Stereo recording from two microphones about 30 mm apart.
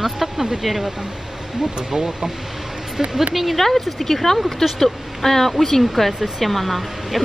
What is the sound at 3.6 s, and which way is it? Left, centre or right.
Speech, centre.